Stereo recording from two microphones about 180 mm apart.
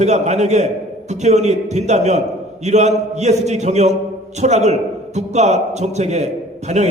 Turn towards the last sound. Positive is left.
turn(degrees=-40)  # may be behind; listen again after turning